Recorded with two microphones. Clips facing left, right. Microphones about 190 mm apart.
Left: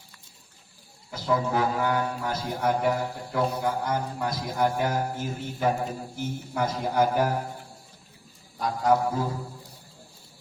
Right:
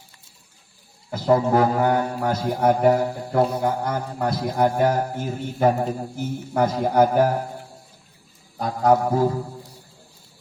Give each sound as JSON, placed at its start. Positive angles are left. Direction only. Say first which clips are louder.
{"t": 1.1, "sound": "speech", "louder": "right 7 dB", "side_deg": -50}
{"t": 8.8, "sound": "music", "louder": "right 5 dB", "side_deg": -55}